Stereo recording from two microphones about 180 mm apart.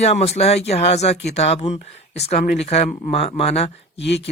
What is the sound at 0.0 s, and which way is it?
Speech, 35° left (ahead or behind).